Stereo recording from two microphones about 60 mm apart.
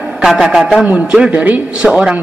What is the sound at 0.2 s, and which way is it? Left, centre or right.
A man's voice, centre.